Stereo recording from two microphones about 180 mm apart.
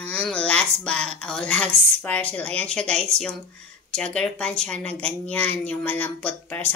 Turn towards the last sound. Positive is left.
turn(degrees=10)  # may be behind; listen again after turning